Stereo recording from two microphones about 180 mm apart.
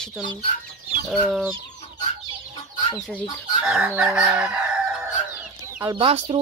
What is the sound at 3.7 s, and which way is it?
Speech, 5° right (ahead or behind).